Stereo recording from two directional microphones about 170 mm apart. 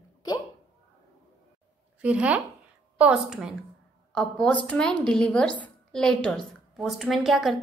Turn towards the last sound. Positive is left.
turn(degrees=0)  # may be behind; listen again after turning